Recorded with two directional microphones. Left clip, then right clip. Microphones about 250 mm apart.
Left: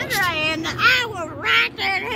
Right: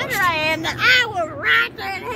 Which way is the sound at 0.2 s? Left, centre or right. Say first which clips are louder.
Right 4 dB; left.